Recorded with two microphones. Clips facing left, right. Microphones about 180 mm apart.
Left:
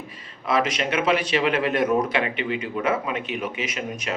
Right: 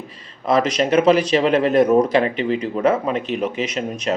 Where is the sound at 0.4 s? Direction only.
40° right (ahead or behind).